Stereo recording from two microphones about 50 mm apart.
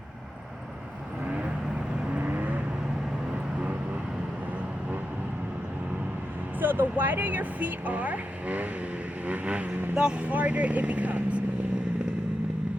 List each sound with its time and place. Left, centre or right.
2.0 s vehicle: right
6.6 s speech: right
9.9 s speech: centre